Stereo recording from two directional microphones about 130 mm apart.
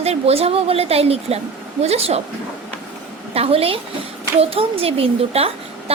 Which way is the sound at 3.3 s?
50° right (ahead or behind).